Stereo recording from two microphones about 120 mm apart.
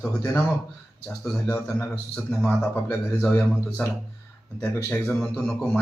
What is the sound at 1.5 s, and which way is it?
A man's voice, 20° left (ahead or behind).